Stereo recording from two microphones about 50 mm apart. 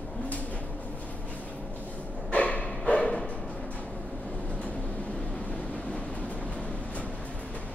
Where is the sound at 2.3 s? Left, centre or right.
Left.